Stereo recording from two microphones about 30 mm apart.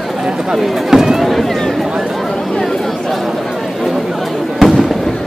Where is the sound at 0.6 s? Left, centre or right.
Centre.